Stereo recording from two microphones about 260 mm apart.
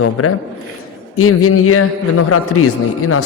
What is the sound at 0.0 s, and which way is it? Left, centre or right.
A man's voice, left.